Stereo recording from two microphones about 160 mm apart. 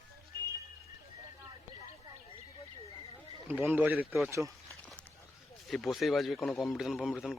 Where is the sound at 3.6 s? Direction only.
10° right (ahead or behind).